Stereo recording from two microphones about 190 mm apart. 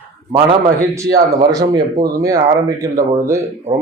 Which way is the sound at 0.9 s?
15° right (ahead or behind).